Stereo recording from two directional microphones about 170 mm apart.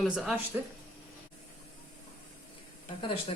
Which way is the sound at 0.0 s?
Centre (ahead or behind).